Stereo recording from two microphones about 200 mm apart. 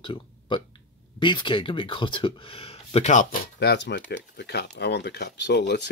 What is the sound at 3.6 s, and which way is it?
Speech, 55° left (ahead or behind).